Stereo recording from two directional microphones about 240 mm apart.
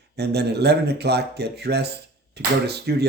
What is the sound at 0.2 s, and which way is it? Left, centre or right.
Speech, right.